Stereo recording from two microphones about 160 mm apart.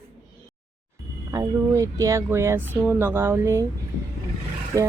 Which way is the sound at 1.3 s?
20° right (ahead or behind).